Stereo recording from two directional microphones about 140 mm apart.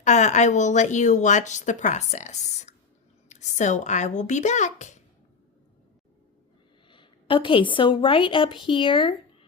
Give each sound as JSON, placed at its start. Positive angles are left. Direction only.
{"t": 0.0, "sound": "a woman's voice", "side_deg": 55}
{"t": 6.9, "sound": "a woman's voice", "side_deg": 35}